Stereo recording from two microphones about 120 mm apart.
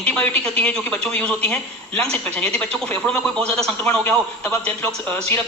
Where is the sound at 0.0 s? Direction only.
10° left (ahead or behind).